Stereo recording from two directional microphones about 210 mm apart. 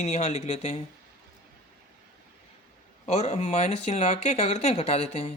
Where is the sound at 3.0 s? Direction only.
30° left (ahead or behind).